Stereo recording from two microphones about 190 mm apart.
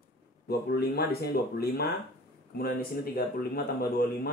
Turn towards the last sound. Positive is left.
turn(degrees=55)  # may be behind; listen again after turning